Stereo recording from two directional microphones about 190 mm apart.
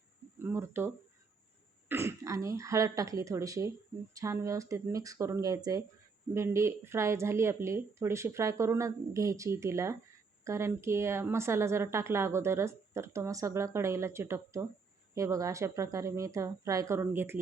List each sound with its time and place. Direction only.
0.4 s a woman's voice: 10° right (ahead or behind)
1.9 s a woman's voice: 15° right (ahead or behind)